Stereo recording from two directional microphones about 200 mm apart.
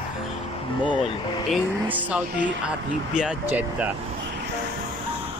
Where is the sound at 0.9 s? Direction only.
25° left (ahead or behind).